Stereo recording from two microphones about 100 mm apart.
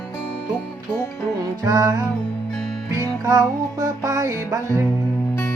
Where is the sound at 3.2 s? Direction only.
35° right (ahead or behind).